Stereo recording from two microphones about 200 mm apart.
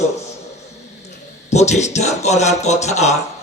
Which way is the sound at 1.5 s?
35° left (ahead or behind).